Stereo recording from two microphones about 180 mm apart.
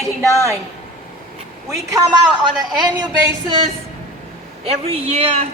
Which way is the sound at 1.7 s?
20° right (ahead or behind).